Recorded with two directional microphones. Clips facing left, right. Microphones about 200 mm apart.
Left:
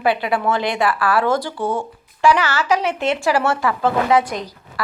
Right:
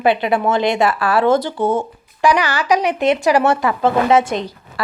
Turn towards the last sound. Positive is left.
turn(degrees=-25)  # may be behind; listen again after turning